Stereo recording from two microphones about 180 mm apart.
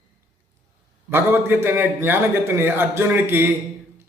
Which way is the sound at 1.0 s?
10° right (ahead or behind).